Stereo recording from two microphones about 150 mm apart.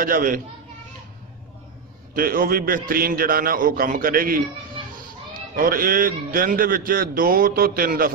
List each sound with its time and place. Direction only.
0.0 s a man's voice: 70° right (ahead or behind)
2.1 s a man's voice: 75° right (ahead or behind)
5.6 s a man's voice: 75° right (ahead or behind)